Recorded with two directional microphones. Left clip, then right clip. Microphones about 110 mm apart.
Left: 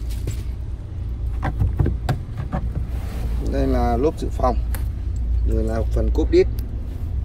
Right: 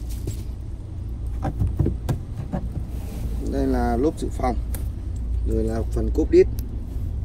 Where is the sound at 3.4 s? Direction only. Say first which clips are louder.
Left 2 dB; 40° left (ahead or behind).